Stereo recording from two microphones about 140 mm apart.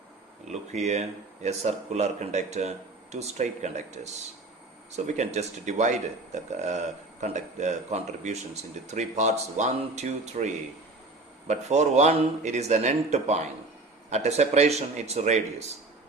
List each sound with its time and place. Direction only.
0.4 s speech: 55° right (ahead or behind)